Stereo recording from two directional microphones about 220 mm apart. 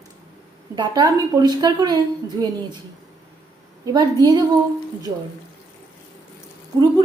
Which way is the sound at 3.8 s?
15° right (ahead or behind).